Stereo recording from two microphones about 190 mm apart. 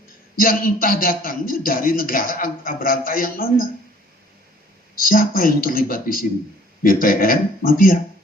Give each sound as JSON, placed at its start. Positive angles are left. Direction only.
{"t": 0.3, "sound": "speech", "side_deg": 50}
{"t": 4.9, "sound": "speech", "side_deg": 45}